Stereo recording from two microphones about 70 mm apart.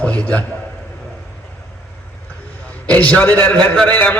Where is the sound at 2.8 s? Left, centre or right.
Left.